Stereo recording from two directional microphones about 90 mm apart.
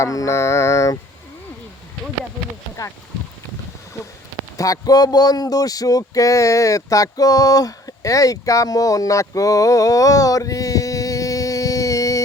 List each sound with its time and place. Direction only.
0.0 s mantra: 35° left (ahead or behind)
4.5 s speech: 40° left (ahead or behind)